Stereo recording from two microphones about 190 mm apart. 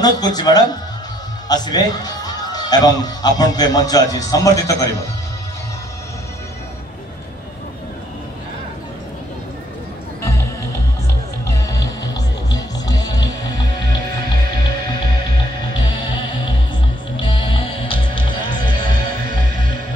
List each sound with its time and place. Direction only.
0.0 s a man's voice: 20° left (ahead or behind)
10.2 s music: 15° left (ahead or behind)